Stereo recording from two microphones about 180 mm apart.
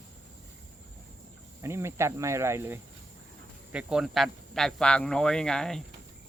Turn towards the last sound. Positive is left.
turn(degrees=5)  # may be behind; listen again after turning